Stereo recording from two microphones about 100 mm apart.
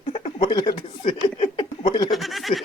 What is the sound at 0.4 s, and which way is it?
Speech, 50° left (ahead or behind).